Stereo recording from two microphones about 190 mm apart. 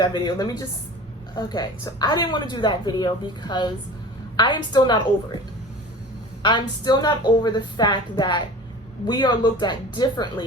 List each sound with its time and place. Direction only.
0.0 s a woman's voice: 25° left (ahead or behind)
6.4 s a woman's voice: 25° left (ahead or behind)